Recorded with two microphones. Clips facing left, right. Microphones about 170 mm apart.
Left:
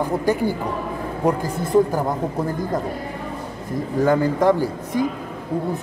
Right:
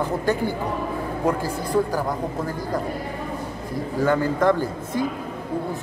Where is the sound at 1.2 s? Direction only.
20° left (ahead or behind).